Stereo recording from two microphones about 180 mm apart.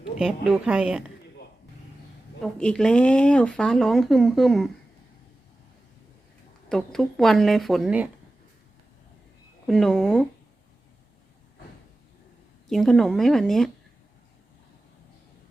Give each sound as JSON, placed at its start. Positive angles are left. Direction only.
{"t": 0.2, "sound": "speech", "side_deg": -5}
{"t": 2.4, "sound": "speech", "side_deg": 5}
{"t": 6.7, "sound": "speech", "side_deg": 5}
{"t": 9.6, "sound": "speech", "side_deg": 0}
{"t": 12.6, "sound": "speech", "side_deg": 0}